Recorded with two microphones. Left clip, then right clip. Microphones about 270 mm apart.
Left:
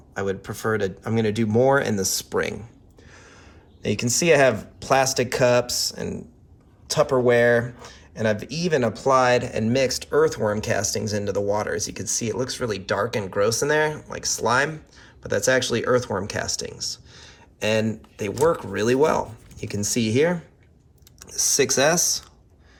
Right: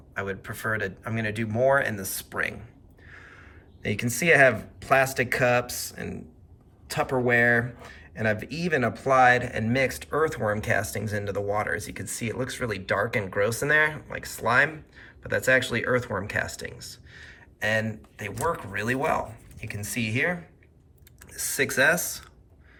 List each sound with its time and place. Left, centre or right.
0.1 s speech: centre
3.1 s a sound: centre
3.8 s speech: centre